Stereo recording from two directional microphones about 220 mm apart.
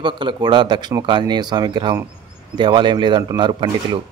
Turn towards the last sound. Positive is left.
turn(degrees=-20)  # may be behind; listen again after turning